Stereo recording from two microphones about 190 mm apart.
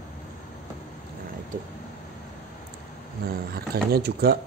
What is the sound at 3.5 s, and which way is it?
Speech, 55° right (ahead or behind).